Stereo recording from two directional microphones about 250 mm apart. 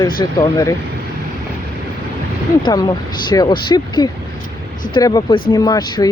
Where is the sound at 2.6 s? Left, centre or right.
Centre.